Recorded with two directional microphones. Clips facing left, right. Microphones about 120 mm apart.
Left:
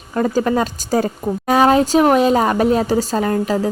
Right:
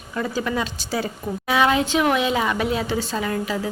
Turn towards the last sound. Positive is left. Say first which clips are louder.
# left 7 dB
turn(degrees=40)  # may be behind; listen again after turning